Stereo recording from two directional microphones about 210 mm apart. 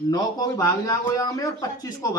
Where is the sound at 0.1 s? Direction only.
15° left (ahead or behind).